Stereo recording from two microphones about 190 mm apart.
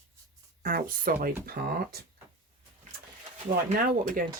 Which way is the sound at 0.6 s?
50° right (ahead or behind).